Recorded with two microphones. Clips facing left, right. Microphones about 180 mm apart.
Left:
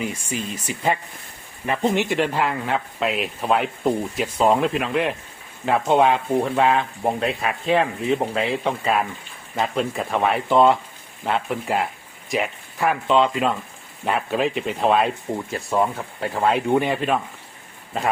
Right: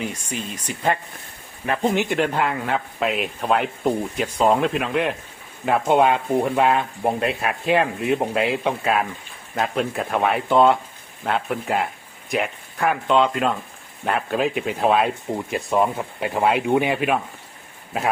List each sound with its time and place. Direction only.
0.0 s speech: 10° left (ahead or behind)
15.4 s speech: 15° right (ahead or behind)